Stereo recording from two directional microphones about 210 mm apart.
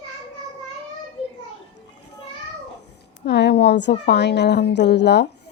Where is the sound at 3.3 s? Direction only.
55° left (ahead or behind).